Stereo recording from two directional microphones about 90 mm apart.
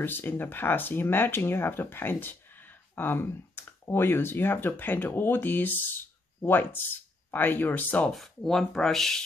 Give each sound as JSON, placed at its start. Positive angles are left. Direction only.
{"t": 0.0, "sound": "speech", "side_deg": 25}
{"t": 8.1, "sound": "speech", "side_deg": 5}